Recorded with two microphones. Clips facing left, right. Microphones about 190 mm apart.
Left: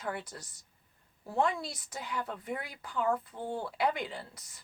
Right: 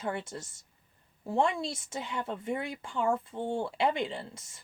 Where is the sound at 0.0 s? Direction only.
25° right (ahead or behind).